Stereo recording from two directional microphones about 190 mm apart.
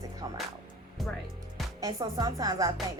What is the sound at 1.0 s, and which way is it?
Speech, centre (ahead or behind).